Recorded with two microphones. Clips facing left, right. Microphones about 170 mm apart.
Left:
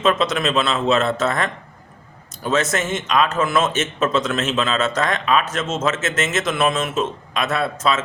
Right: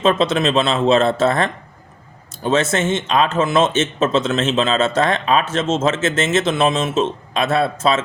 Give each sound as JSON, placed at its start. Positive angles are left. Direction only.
{"t": 0.0, "sound": "speech", "side_deg": -30}